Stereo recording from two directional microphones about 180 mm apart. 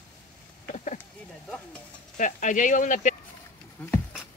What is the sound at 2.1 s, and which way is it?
Speech, 45° left (ahead or behind).